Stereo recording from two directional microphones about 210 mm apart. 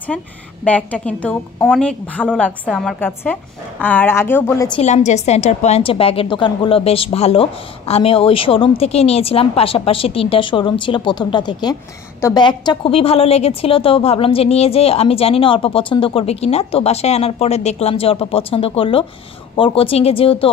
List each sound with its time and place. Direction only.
0.1 s a woman's voice: centre (ahead or behind)
4.6 s a woman's voice: 30° left (ahead or behind)